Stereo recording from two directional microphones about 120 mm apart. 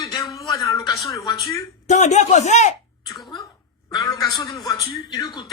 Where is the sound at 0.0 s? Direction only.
30° left (ahead or behind).